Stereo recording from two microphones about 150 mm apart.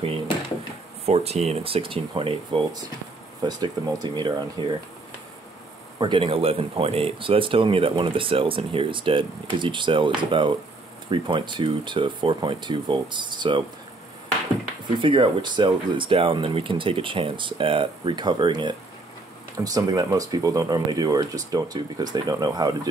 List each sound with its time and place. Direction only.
1.0 s speech: 45° right (ahead or behind)
3.4 s speech: 25° right (ahead or behind)
5.9 s speech: 35° right (ahead or behind)
15.0 s speech: 35° right (ahead or behind)